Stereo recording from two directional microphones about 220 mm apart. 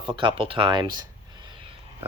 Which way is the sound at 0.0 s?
20° right (ahead or behind).